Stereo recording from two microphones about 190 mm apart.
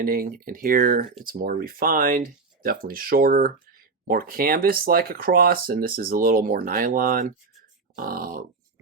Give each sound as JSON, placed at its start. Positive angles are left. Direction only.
{"t": 0.0, "sound": "speech", "side_deg": -50}